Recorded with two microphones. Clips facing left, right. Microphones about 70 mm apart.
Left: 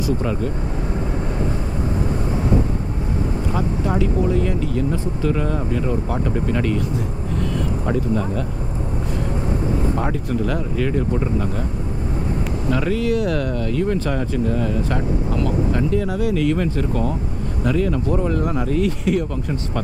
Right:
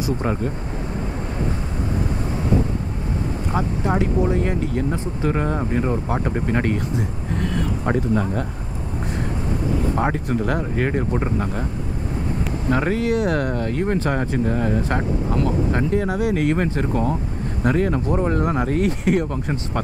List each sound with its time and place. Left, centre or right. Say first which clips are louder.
0.0 s speech: left 1 dB; right
3.5 s speech: right 1 dB; right
9.9 s speech: right 1 dB; right
12.6 s speech: even; right